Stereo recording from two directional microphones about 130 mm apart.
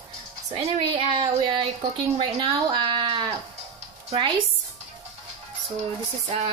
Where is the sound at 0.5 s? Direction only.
45° right (ahead or behind).